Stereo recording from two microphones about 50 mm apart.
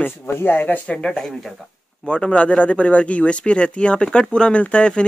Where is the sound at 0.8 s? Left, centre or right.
Left.